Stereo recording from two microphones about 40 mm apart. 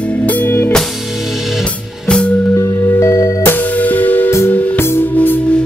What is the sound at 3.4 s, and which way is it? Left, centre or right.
Music, left.